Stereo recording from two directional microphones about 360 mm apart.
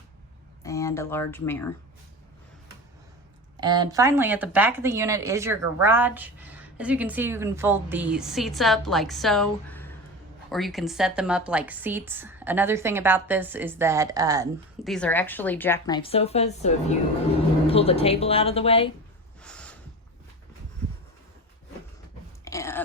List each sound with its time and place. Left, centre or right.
0.6 s speech: centre
3.6 s speech: centre
14.8 s speech: centre
19.4 s snort: centre
22.4 s dog: centre